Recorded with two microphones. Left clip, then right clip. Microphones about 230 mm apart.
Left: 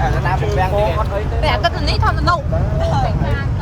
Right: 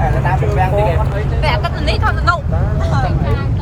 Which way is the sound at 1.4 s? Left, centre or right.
Left.